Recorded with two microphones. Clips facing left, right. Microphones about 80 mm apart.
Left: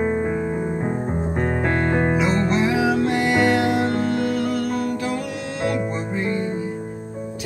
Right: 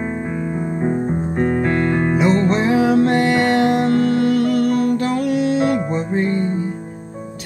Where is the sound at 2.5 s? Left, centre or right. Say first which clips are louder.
Right 4 dB; right.